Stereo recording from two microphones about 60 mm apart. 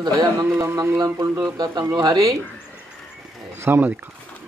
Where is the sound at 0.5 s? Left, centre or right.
Right.